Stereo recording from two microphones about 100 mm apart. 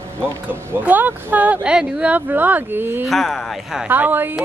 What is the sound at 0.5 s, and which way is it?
Speech, 15° right (ahead or behind).